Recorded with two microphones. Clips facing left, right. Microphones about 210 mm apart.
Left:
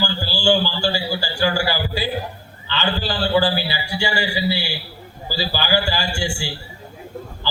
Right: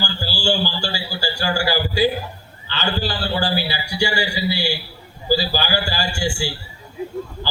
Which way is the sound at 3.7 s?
40° right (ahead or behind).